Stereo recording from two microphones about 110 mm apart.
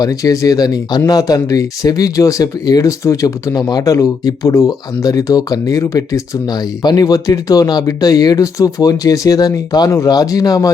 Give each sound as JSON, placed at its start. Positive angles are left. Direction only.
{"t": 0.0, "sound": "speech", "side_deg": 35}